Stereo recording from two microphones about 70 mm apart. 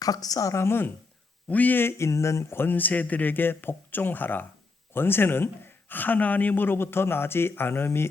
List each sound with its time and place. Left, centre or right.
0.0 s a woman's voice: left
2.0 s a man's voice: left